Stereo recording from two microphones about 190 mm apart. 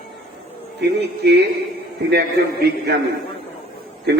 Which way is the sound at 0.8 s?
60° right (ahead or behind).